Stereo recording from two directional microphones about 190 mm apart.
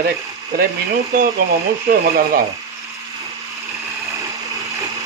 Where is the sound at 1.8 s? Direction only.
50° right (ahead or behind).